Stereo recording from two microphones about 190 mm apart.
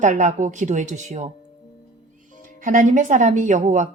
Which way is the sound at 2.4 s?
45° right (ahead or behind).